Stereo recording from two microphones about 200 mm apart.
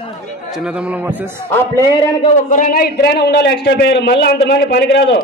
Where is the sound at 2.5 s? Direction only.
45° left (ahead or behind).